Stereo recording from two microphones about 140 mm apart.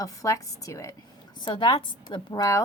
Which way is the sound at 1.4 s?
35° left (ahead or behind).